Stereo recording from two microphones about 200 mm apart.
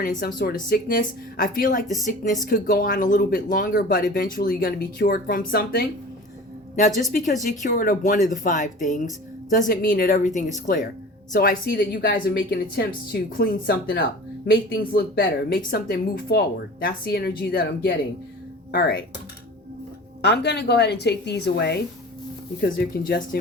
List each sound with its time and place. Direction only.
0.0 s a woman's voice: 45° left (ahead or behind)
20.2 s a woman's voice: 55° left (ahead or behind)